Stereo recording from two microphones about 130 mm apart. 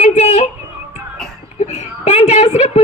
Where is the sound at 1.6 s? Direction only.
55° left (ahead or behind).